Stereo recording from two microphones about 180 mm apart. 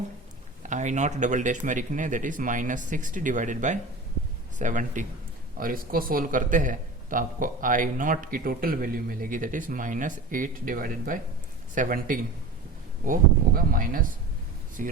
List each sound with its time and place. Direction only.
0.6 s speech: 40° right (ahead or behind)
13.6 s speech: 50° right (ahead or behind)